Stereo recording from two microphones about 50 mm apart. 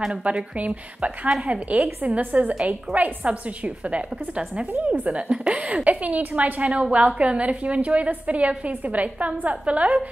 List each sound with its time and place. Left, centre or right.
0.1 s a woman's voice: right